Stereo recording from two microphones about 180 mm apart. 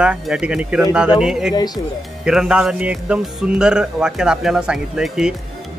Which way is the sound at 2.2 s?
5° right (ahead or behind).